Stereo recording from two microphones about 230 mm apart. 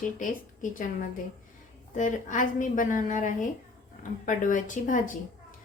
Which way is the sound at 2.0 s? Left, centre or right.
Left.